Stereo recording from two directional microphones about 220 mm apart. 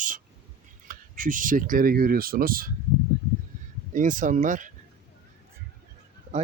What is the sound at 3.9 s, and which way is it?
Speech, 35° right (ahead or behind).